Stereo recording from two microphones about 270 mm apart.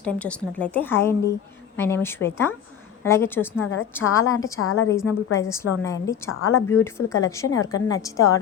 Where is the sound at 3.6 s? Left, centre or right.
Left.